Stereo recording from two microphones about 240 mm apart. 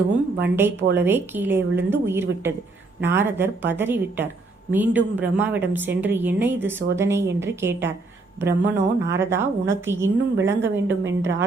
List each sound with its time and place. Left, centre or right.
0.4 s a woman's voice: centre
10.8 s a woman's voice: right